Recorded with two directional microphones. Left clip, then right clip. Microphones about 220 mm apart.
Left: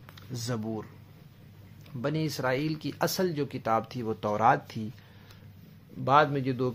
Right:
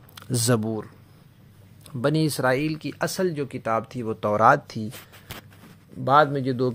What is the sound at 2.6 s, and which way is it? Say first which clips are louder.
Speech: right 3 dB; 15° right (ahead or behind).